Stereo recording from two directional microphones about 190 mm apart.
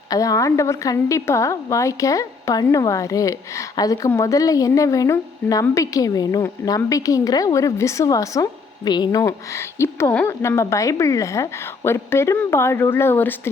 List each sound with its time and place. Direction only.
0.1 s a woman's voice: 20° left (ahead or behind)